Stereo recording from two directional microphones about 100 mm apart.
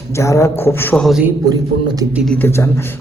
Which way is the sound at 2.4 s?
25° left (ahead or behind).